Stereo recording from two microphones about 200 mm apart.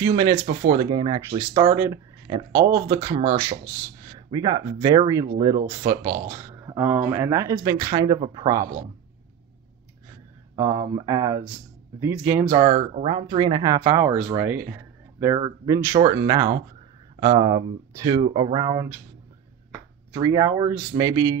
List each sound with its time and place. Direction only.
0.0 s speech: 25° right (ahead or behind)
7.7 s speech: 30° right (ahead or behind)
8.0 s speech: 20° right (ahead or behind)
10.5 s speech: 15° right (ahead or behind)
12.4 s speech: 30° right (ahead or behind)
14.0 s speech: 10° right (ahead or behind)
17.2 s speech: 20° right (ahead or behind)
20.1 s speech: 15° right (ahead or behind)